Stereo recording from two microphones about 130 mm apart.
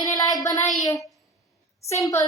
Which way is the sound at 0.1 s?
30° left (ahead or behind).